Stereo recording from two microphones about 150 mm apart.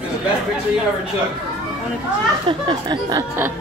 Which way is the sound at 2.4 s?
30° right (ahead or behind).